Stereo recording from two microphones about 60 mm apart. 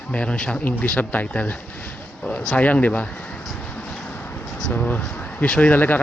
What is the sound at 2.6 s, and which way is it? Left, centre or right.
Speech, left.